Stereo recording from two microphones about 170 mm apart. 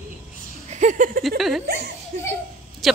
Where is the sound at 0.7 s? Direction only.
45° right (ahead or behind).